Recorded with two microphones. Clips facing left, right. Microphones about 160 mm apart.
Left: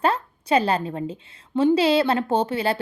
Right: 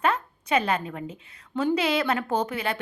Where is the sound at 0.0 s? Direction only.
35° left (ahead or behind).